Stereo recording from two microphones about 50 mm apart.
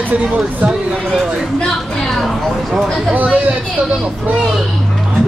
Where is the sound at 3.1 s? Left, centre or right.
Right.